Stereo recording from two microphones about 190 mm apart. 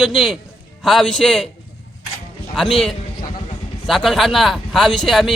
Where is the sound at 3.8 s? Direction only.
Centre (ahead or behind).